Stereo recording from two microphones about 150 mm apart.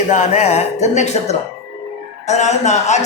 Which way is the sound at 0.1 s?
50° left (ahead or behind).